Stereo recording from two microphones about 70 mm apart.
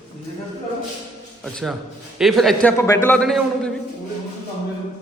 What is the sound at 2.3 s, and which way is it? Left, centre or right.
Speech, centre.